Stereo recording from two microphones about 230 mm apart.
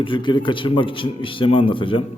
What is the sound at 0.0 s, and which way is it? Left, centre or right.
A man's voice, left.